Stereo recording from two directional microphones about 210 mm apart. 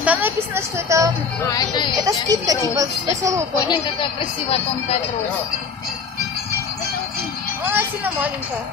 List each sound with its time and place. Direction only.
0.0 s a woman's voice: 10° right (ahead or behind)
1.4 s speech: 20° left (ahead or behind)
2.0 s a woman's voice: 15° right (ahead or behind)
3.5 s speech: 20° left (ahead or behind)
7.7 s a woman's voice: 10° right (ahead or behind)